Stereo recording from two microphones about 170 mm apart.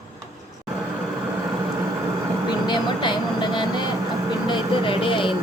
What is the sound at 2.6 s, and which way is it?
Vehicle, 25° left (ahead or behind).